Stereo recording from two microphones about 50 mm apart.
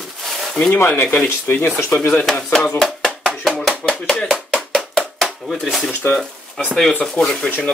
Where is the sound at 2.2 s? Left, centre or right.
Centre.